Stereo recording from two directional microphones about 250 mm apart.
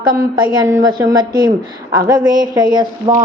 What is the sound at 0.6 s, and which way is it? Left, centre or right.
Speech, centre.